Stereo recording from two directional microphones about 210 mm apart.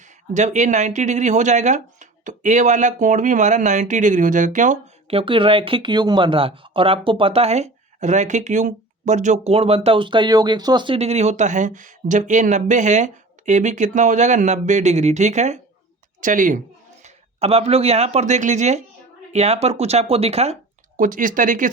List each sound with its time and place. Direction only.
0.3 s speech: 35° right (ahead or behind)
17.0 s speech: 30° right (ahead or behind)